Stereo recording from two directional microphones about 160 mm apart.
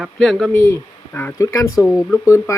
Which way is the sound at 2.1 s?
15° left (ahead or behind).